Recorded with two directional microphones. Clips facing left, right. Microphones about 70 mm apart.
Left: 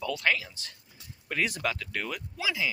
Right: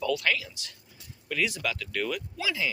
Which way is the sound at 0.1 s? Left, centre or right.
Left.